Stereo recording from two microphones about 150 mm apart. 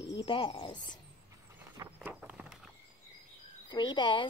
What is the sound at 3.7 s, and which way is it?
Speech, 30° left (ahead or behind).